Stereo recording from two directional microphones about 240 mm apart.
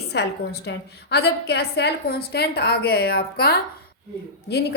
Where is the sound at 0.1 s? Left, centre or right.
Left.